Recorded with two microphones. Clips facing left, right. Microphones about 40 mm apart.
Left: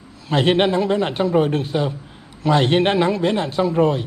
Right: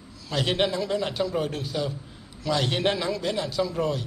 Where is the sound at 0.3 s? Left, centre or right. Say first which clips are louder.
Left 8 dB; left.